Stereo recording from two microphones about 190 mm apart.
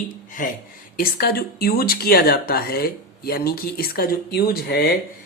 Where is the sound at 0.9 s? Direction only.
55° left (ahead or behind).